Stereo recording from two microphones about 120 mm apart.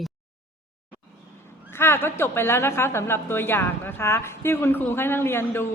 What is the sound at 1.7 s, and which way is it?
A woman's voice, 20° left (ahead or behind).